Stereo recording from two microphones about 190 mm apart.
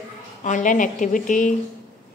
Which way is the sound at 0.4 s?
40° left (ahead or behind).